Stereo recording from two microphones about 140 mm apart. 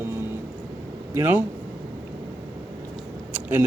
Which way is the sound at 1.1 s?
15° right (ahead or behind).